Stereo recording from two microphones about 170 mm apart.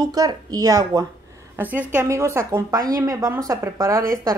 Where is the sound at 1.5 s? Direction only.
10° right (ahead or behind).